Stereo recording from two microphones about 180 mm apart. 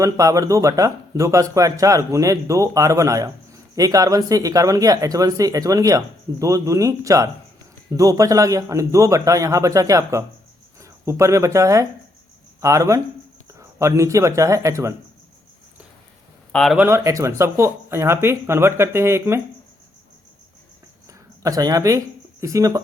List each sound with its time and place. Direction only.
0.0 s a man's voice: 20° right (ahead or behind)
16.5 s speech: 5° left (ahead or behind)
16.7 s speech: 15° right (ahead or behind)
21.4 s speech: 20° right (ahead or behind)